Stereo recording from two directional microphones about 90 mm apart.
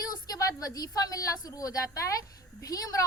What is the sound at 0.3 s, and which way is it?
A woman's voice, 45° left (ahead or behind).